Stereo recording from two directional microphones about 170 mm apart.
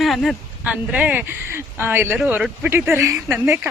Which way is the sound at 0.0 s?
Centre (ahead or behind).